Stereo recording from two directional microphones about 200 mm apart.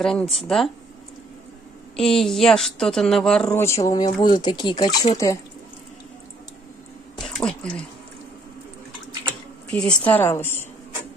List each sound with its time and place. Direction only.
0.0 s a woman's voice: centre (ahead or behind)
2.0 s a woman's voice: centre (ahead or behind)
3.4 s a woman's voice: 15° left (ahead or behind)
7.2 s a sound: centre (ahead or behind)
9.7 s a woman's voice: 5° left (ahead or behind)